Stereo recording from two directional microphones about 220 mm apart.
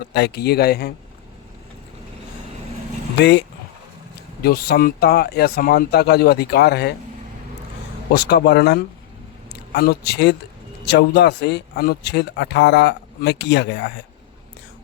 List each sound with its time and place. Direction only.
0.1 s speech: 50° left (ahead or behind)
3.2 s speech: 50° left (ahead or behind)
4.4 s speech: 40° left (ahead or behind)
8.1 s speech: 45° left (ahead or behind)